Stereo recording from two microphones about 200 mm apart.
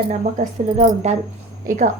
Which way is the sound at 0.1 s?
35° right (ahead or behind).